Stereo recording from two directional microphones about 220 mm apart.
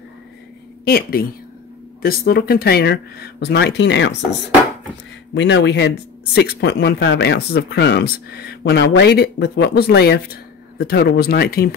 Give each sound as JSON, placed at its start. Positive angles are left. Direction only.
{"t": 0.8, "sound": "speech", "side_deg": 45}
{"t": 5.3, "sound": "speech", "side_deg": 55}